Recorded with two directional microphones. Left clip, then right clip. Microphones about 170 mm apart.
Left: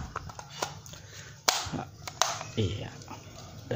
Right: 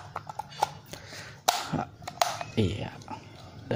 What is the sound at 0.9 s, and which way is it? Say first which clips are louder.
Chopping: right 5 dB; 25° right (ahead or behind).